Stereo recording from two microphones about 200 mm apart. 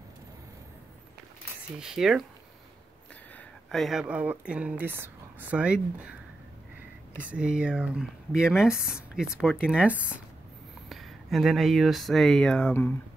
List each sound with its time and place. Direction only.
1.8 s speech: centre (ahead or behind)
3.7 s speech: centre (ahead or behind)
7.2 s speech: 5° right (ahead or behind)